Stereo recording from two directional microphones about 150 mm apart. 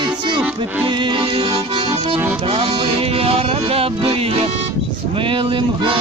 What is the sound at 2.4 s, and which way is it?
Speech, 35° right (ahead or behind).